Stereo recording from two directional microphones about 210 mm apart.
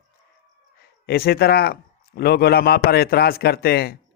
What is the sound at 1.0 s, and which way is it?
A man's voice, 45° left (ahead or behind).